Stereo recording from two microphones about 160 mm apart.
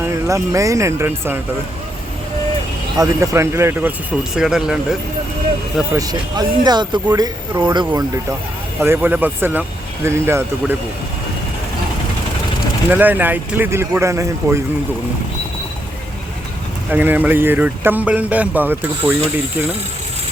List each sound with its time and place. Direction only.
0.0 s speech: 20° right (ahead or behind)
3.0 s speech: 20° right (ahead or behind)
4.4 s speech: 5° right (ahead or behind)
5.9 s speech: 25° right (ahead or behind)
8.8 s speech: 15° right (ahead or behind)
12.9 s speech: 10° right (ahead or behind)
16.9 s speech: 10° right (ahead or behind)